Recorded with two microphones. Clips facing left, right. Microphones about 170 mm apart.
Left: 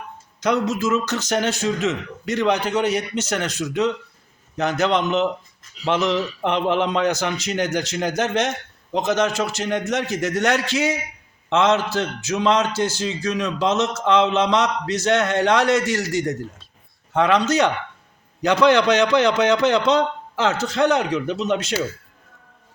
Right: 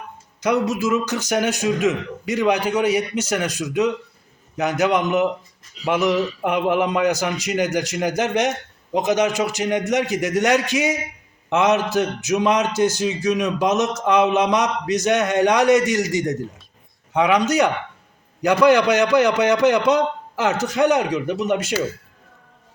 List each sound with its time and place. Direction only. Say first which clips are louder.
0.3 s a man's voice: right 1 dB; 10° right (ahead or behind)